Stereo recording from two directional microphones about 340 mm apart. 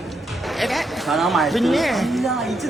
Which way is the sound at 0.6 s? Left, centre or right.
Centre.